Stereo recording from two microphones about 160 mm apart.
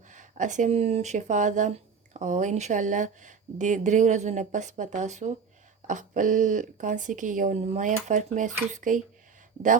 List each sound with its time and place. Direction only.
0.1 s speech: 50° right (ahead or behind)